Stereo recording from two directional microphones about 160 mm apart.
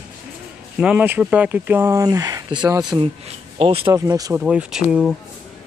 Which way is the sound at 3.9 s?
20° right (ahead or behind).